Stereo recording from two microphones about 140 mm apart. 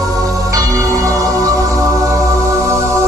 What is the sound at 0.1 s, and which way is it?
Music, 25° right (ahead or behind).